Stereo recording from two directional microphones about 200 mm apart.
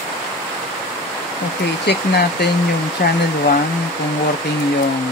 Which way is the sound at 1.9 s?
55° left (ahead or behind).